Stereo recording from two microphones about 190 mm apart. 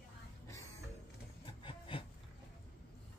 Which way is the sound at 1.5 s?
25° left (ahead or behind).